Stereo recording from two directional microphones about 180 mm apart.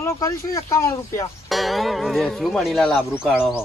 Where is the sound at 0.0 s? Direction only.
15° left (ahead or behind).